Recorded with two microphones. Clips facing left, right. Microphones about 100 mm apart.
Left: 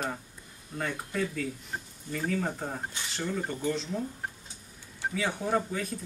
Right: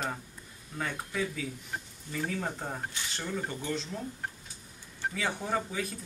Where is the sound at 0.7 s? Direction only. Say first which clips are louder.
Left 2 dB; centre (ahead or behind).